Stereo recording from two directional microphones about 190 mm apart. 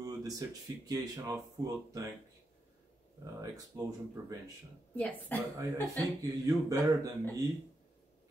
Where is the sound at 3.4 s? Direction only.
20° right (ahead or behind).